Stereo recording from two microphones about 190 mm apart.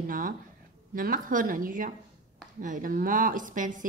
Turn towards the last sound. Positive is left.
turn(degrees=-45)  # may be behind; listen again after turning